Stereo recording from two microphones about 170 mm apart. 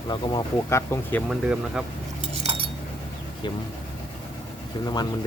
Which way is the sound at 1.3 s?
5° right (ahead or behind).